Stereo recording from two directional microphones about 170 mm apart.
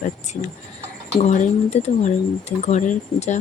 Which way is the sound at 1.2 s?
40° left (ahead or behind).